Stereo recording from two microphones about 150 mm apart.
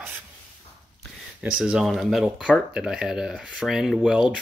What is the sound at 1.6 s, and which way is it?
Speech, 5° right (ahead or behind).